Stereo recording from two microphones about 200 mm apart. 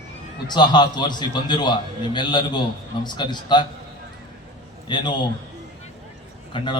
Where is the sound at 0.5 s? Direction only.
20° left (ahead or behind).